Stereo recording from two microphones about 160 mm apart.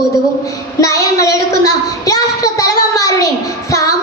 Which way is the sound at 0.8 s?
20° left (ahead or behind).